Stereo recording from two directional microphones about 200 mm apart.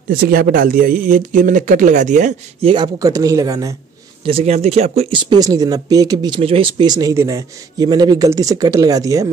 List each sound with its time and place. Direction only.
0.1 s speech: 45° right (ahead or behind)
2.7 s speech: 20° right (ahead or behind)
4.3 s speech: 30° right (ahead or behind)